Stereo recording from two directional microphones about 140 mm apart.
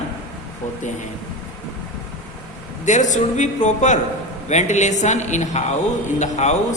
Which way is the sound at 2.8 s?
60° left (ahead or behind).